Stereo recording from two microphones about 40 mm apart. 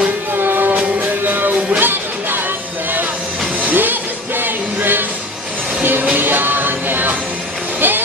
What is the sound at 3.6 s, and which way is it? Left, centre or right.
Music, right.